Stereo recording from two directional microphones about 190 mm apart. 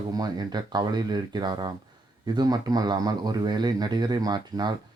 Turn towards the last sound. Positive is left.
turn(degrees=-20)  # may be behind; listen again after turning